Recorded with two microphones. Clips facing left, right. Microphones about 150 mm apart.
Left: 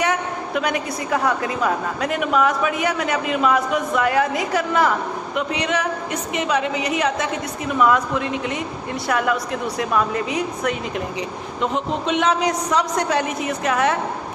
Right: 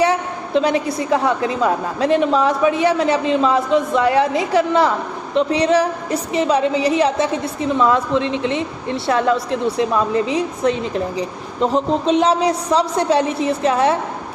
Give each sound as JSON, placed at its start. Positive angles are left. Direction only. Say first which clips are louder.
{"t": 0.0, "sound": "a woman's voice", "louder": "right 4 dB", "side_deg": -30}